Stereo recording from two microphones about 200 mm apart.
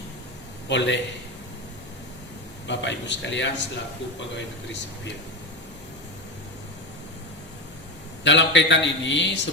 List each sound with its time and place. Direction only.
0.7 s a man's voice: 60° left (ahead or behind)
2.6 s a man's voice: 60° left (ahead or behind)
8.2 s a man's voice: 65° left (ahead or behind)